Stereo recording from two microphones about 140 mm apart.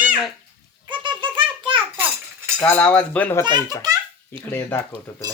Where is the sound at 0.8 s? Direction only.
35° right (ahead or behind).